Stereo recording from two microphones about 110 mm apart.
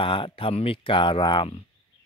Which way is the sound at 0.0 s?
50° left (ahead or behind).